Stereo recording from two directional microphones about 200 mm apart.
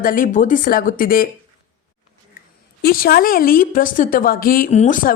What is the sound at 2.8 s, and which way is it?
Speech, 50° left (ahead or behind).